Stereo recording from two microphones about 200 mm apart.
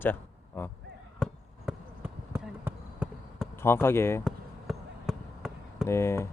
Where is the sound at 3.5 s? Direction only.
10° left (ahead or behind).